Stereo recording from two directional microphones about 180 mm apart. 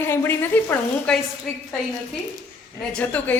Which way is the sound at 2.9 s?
10° left (ahead or behind).